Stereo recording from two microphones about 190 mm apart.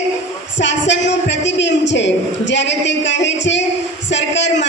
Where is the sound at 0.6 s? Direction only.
70° left (ahead or behind).